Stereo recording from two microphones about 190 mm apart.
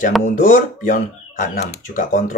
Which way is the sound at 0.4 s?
40° left (ahead or behind).